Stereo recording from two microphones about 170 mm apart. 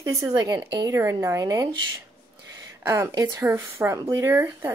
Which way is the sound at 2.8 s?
20° right (ahead or behind).